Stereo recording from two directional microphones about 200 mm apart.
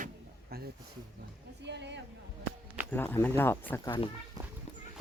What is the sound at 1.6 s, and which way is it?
Speech, 60° right (ahead or behind).